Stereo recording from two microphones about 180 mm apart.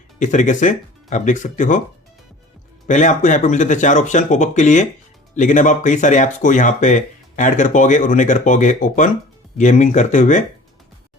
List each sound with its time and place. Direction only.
0.2 s speech: 45° left (ahead or behind)
2.8 s speech: 45° left (ahead or behind)